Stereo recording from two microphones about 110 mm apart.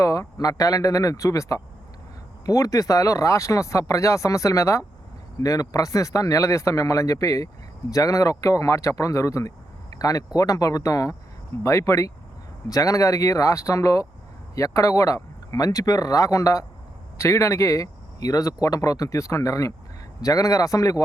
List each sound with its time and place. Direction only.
0.0 s speech: 30° left (ahead or behind)